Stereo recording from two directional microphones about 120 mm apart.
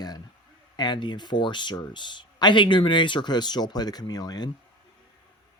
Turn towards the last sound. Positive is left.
turn(degrees=35)  # may be behind; listen again after turning